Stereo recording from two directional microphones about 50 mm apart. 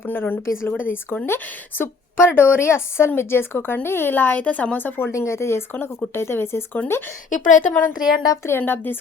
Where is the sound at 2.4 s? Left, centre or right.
Left.